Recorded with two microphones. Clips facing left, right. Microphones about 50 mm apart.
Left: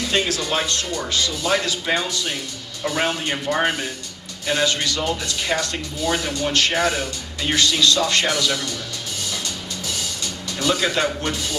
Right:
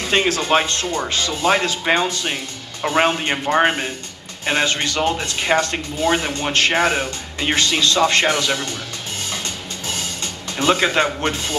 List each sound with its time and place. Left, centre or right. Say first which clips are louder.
0.0 s speech: right 3 dB; right
9.8 s music: right 3 dB; right
11.1 s speech: right 3 dB; right